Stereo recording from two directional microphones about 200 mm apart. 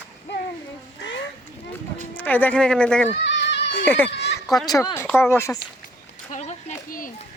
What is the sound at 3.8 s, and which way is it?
Speech, 10° left (ahead or behind).